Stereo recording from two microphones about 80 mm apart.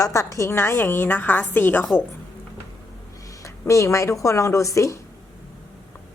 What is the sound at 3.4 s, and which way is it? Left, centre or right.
Speech, left.